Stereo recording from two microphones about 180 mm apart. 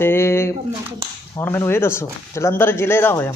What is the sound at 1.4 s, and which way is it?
Speech, 10° left (ahead or behind).